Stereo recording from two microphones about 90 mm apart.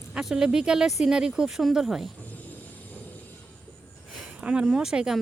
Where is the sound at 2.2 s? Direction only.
20° left (ahead or behind).